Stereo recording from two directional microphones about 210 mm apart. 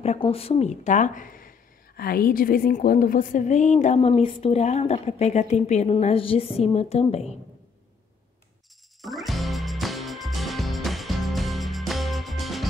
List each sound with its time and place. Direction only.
0.0 s a woman's voice: 30° left (ahead or behind)
9.0 s music: centre (ahead or behind)